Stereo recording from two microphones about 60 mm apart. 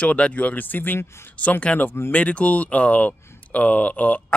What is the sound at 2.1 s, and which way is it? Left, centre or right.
Speech, left.